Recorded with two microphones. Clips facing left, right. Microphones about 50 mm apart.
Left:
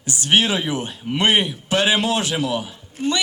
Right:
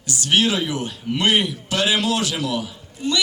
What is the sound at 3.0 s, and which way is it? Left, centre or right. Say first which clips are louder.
Speech: left 2 dB; left.